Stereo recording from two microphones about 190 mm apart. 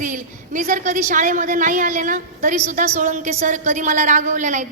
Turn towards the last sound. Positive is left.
turn(degrees=-40)  # may be behind; listen again after turning